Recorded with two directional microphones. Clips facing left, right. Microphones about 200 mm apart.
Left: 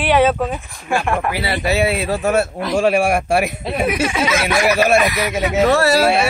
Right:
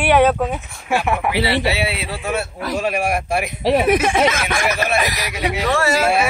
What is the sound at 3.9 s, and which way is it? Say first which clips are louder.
Speech: right 3 dB; 50° right (ahead or behind).